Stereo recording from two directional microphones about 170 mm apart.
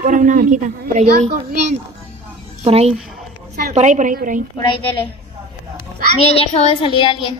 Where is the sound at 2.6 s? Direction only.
35° right (ahead or behind).